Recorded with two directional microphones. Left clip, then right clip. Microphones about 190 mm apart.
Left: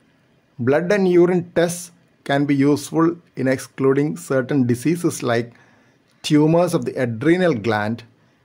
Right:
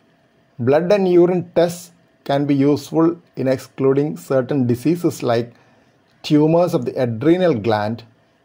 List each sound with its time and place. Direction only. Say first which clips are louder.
0.7 s speech: right 2 dB; 10° left (ahead or behind)